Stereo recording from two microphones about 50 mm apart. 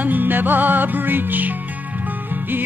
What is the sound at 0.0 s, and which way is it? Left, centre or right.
Music, right.